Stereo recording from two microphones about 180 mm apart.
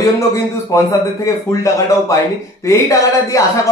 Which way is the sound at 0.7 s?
15° left (ahead or behind).